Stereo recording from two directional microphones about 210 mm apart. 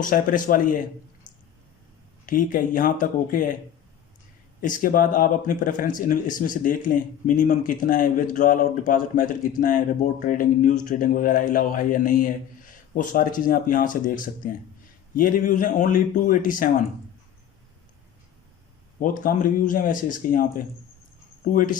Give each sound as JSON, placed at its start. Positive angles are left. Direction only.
{"t": 0.0, "sound": "speech", "side_deg": 40}
{"t": 2.2, "sound": "speech", "side_deg": 40}
{"t": 4.6, "sound": "speech", "side_deg": 40}
{"t": 18.9, "sound": "speech", "side_deg": 40}